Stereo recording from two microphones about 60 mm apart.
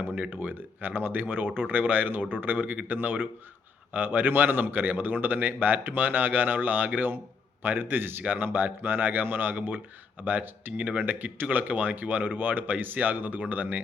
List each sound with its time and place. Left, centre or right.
0.2 s speech: right